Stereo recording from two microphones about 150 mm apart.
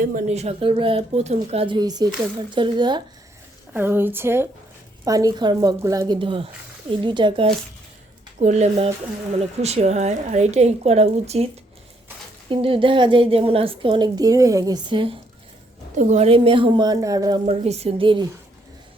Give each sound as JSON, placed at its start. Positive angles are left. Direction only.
{"t": 0.1, "sound": "a woman's voice", "side_deg": -55}
{"t": 3.7, "sound": "a woman's voice", "side_deg": -15}
{"t": 6.1, "sound": "a woman's voice", "side_deg": -35}
{"t": 8.4, "sound": "a woman's voice", "side_deg": -50}
{"t": 12.5, "sound": "a woman's voice", "side_deg": -35}
{"t": 16.0, "sound": "a woman's voice", "side_deg": -50}
{"t": 17.4, "sound": "a woman's voice", "side_deg": -45}